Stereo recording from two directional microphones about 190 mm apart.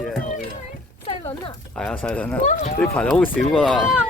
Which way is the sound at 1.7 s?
5° left (ahead or behind).